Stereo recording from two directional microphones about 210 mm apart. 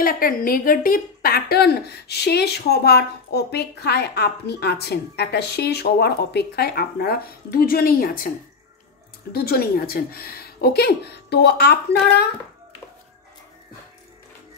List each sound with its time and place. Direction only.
0.0 s a woman's voice: 45° left (ahead or behind)
9.3 s a woman's voice: 45° left (ahead or behind)